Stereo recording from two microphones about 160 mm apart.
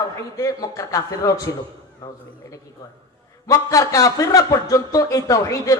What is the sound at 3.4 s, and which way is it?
Speech, 20° left (ahead or behind).